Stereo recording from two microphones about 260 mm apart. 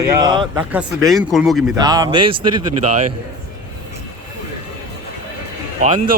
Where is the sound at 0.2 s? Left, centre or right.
Centre.